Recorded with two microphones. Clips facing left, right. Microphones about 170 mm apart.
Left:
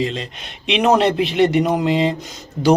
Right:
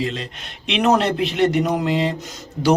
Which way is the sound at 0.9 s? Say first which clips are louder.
Left 3 dB; centre (ahead or behind).